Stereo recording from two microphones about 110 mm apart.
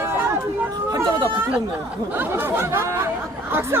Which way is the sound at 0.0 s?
20° right (ahead or behind).